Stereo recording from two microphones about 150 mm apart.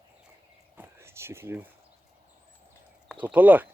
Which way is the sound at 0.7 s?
15° right (ahead or behind).